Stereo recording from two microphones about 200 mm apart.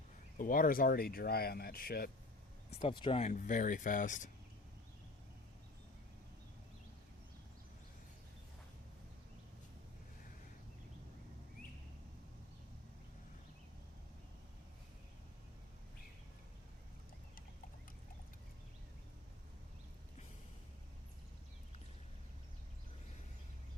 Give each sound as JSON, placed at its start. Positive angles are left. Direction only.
{"t": 0.3, "sound": "speech", "side_deg": 45}
{"t": 2.6, "sound": "speech", "side_deg": 30}